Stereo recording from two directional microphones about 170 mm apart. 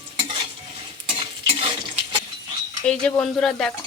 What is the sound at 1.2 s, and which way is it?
Stir, 30° right (ahead or behind).